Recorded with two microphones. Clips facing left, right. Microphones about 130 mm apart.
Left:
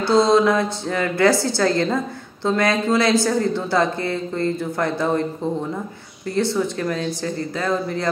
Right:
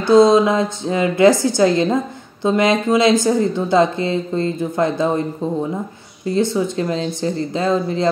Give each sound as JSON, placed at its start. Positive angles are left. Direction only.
{"t": 0.0, "sound": "speech", "side_deg": -20}
{"t": 6.2, "sound": "speech", "side_deg": -15}